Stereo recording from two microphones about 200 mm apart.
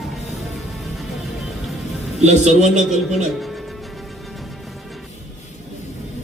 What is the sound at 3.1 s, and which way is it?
Speech, centre (ahead or behind).